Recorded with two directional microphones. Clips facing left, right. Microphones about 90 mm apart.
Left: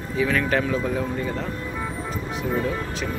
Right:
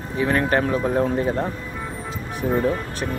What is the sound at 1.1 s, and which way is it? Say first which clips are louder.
Speech: right 5 dB; 70° right (ahead or behind).